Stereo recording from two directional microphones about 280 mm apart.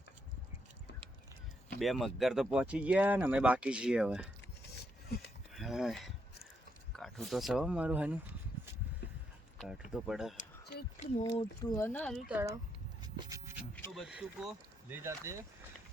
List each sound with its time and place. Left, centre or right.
1.8 s speech: centre
4.7 s a sound: left
5.5 s speech: centre
9.6 s speech: centre
10.3 s a sound: left
11.2 s speech: centre
13.7 s speech: centre